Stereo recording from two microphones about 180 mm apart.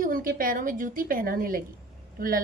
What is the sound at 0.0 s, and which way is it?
A woman's voice, 50° right (ahead or behind).